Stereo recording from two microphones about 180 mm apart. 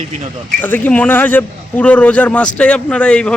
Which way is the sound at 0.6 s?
10° left (ahead or behind).